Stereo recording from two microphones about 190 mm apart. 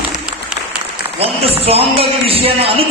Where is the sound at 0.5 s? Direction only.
5° right (ahead or behind).